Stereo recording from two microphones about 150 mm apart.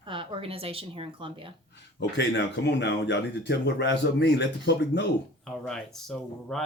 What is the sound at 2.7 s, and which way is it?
Speech, 90° left.